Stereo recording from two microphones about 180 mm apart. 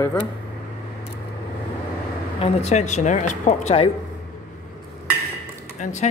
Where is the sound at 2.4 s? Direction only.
35° left (ahead or behind).